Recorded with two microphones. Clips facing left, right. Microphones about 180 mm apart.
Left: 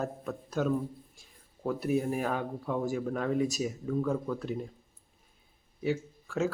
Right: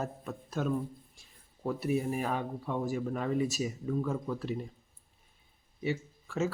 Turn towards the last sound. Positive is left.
turn(degrees=0)  # may be behind; listen again after turning